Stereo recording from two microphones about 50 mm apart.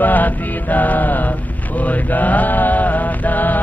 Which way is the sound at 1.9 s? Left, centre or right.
Left.